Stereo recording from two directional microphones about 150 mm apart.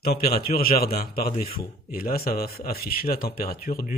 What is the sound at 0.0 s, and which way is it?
Speech, 90° left.